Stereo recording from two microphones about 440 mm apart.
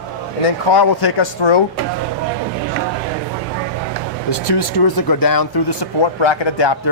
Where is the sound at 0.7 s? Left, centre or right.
Left.